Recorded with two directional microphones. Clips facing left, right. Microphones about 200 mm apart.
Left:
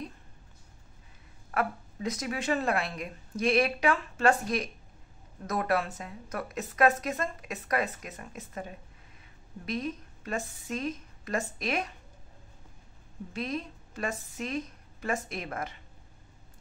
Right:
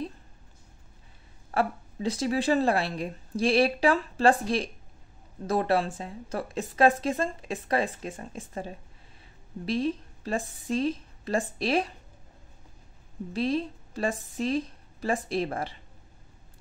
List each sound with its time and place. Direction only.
1.5 s a woman's voice: 30° right (ahead or behind)
13.3 s a woman's voice: 30° right (ahead or behind)